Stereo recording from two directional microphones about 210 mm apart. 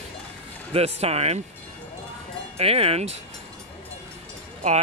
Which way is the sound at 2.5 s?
30° right (ahead or behind).